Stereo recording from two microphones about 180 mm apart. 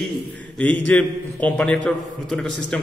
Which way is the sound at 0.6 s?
10° left (ahead or behind).